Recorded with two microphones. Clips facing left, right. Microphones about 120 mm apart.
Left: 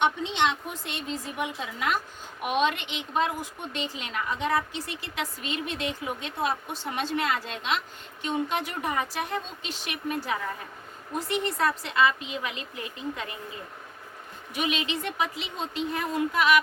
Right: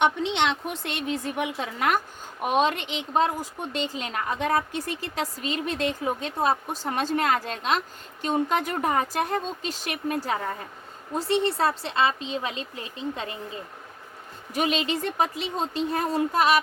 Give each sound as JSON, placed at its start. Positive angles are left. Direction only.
{"t": 0.0, "sound": "a woman's voice", "side_deg": -75}
{"t": 2.4, "sound": "a woman's voice", "side_deg": -35}
{"t": 14.5, "sound": "speech", "side_deg": -35}